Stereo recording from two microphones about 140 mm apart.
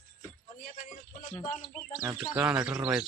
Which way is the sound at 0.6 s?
70° left (ahead or behind).